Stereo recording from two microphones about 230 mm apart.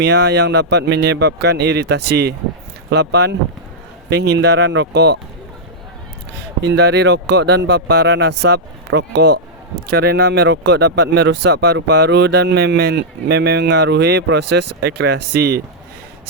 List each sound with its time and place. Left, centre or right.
0.0 s speech: right
6.6 s speech: right